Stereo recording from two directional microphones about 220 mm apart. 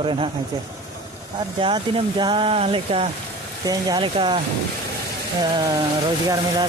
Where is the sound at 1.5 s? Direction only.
25° right (ahead or behind).